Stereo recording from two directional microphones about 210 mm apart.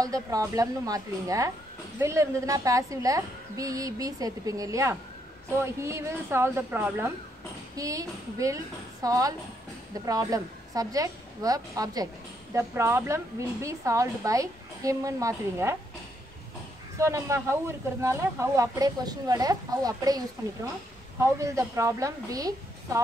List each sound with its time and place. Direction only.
0.0 s speech: 15° right (ahead or behind)
17.0 s speech: 15° right (ahead or behind)
21.2 s speech: 15° right (ahead or behind)